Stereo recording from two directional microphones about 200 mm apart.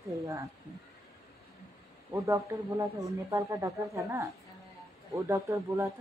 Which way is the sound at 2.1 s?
15° right (ahead or behind).